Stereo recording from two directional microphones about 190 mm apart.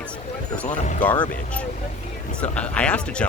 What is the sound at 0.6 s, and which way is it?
Speech, 40° left (ahead or behind).